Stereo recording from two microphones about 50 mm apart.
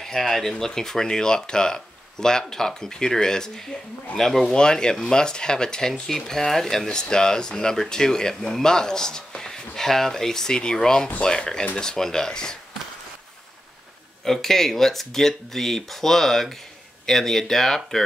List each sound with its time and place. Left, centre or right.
0.0 s speech: centre
4.5 s speech: centre
14.2 s speech: centre